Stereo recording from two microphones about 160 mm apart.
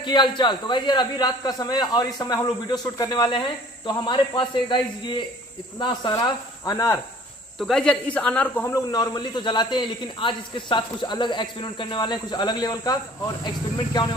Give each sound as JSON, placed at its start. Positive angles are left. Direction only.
{"t": 0.0, "sound": "a man's voice", "side_deg": 30}
{"t": 7.5, "sound": "speech", "side_deg": 5}
{"t": 8.6, "sound": "a man's voice", "side_deg": 25}